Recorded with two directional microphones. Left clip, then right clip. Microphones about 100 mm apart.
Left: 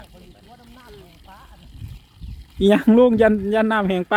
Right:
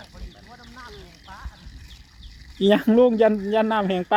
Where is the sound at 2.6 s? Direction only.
30° left (ahead or behind).